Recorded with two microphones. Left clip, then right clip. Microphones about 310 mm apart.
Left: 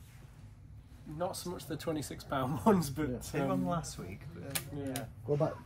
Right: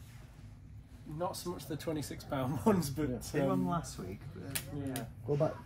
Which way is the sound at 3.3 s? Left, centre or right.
Left.